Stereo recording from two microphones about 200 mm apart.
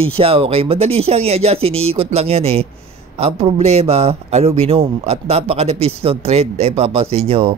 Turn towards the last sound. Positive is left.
turn(degrees=-30)  # may be behind; listen again after turning